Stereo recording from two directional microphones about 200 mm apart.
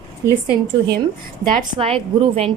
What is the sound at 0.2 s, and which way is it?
Speech, 15° right (ahead or behind).